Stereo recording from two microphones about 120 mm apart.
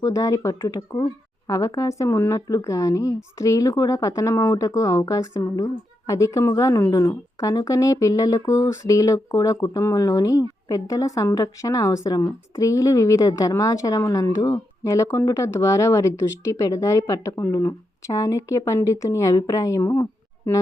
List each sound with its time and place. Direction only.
0.0 s a woman's voice: 30° left (ahead or behind)